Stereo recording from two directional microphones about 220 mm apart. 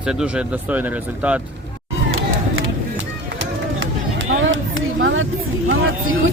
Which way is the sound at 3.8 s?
60° right (ahead or behind).